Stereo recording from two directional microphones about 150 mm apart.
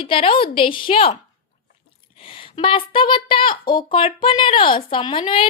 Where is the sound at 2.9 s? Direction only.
35° left (ahead or behind).